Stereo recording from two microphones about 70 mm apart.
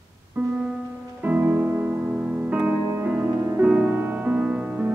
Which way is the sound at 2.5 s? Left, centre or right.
Centre.